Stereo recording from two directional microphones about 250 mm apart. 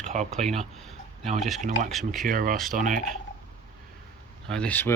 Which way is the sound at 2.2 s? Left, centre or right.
Right.